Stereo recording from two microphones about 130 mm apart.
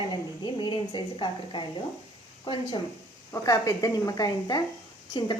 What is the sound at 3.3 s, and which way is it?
A woman's voice, 25° left (ahead or behind).